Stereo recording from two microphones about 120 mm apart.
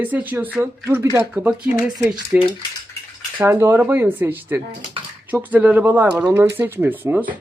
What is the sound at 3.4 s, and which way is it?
Speech, 20° right (ahead or behind).